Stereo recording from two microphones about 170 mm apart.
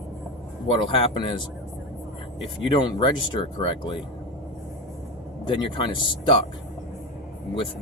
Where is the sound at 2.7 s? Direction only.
30° left (ahead or behind).